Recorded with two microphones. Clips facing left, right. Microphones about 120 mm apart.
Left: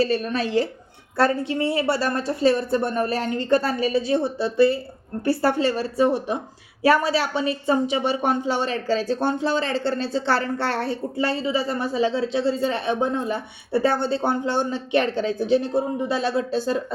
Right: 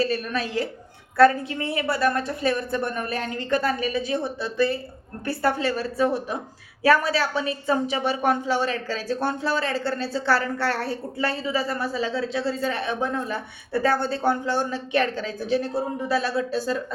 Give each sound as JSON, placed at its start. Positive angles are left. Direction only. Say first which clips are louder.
{"t": 0.0, "sound": "a woman's voice", "louder": "left 3 dB", "side_deg": 30}